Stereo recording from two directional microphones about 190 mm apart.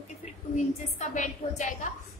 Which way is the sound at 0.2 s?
40° left (ahead or behind).